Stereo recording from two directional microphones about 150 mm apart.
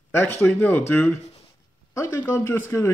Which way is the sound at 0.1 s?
15° left (ahead or behind).